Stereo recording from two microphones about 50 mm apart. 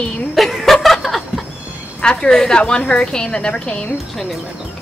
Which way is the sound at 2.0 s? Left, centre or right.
Centre.